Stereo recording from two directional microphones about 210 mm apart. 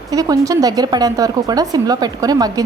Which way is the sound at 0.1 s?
15° right (ahead or behind).